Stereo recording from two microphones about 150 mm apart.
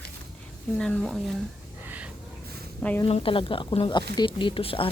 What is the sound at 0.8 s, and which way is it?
Speech, 5° left (ahead or behind).